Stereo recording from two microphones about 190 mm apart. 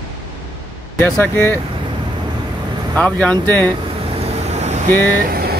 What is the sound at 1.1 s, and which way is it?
Speech, 10° left (ahead or behind).